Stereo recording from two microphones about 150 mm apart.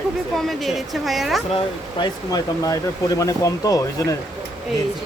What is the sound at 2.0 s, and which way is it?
Speech, 25° left (ahead or behind).